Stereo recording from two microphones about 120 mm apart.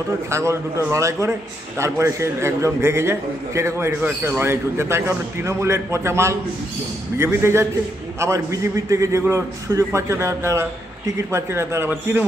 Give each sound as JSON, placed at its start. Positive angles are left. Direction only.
{"t": 0.3, "sound": "a man's voice", "side_deg": -25}